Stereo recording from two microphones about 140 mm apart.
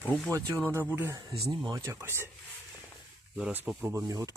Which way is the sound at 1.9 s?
15° right (ahead or behind).